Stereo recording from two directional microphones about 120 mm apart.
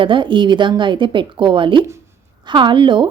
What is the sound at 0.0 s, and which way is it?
A woman's voice, 45° right (ahead or behind).